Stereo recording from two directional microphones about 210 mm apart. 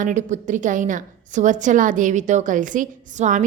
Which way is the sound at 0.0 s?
35° right (ahead or behind).